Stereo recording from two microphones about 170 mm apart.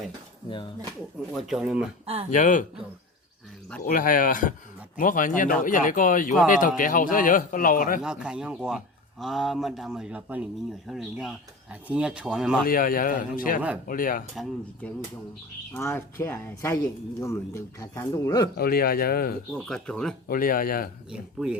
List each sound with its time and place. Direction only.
0.4 s speech: 30° left (ahead or behind)
1.3 s speech: centre (ahead or behind)
2.3 s speech: 50° left (ahead or behind)
3.8 s speech: 55° left (ahead or behind)
8.0 s speech: 5° right (ahead or behind)
12.6 s a man's voice: 55° left (ahead or behind)
14.3 s speech: 5° left (ahead or behind)
18.5 s a man's voice: 65° left (ahead or behind)
19.5 s speech: 5° left (ahead or behind)
20.2 s a man's voice: 55° left (ahead or behind)
21.1 s speech: 5° right (ahead or behind)